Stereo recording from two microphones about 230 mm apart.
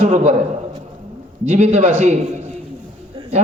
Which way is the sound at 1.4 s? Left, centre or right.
Right.